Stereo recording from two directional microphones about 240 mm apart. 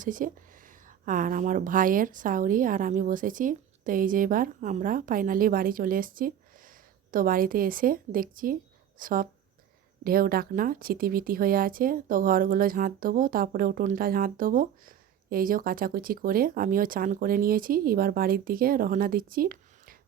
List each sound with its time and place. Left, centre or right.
0.0 s speech: right